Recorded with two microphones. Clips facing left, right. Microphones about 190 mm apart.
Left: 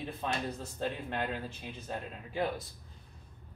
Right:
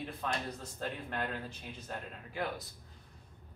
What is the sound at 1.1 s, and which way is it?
Speech, 20° left (ahead or behind).